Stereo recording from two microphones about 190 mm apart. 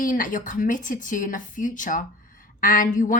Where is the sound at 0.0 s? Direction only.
45° left (ahead or behind).